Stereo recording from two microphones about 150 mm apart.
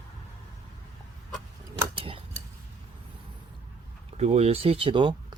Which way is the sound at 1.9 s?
35° right (ahead or behind).